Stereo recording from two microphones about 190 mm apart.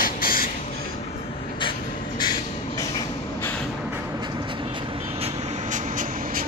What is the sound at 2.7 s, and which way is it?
Vehicle, 15° left (ahead or behind).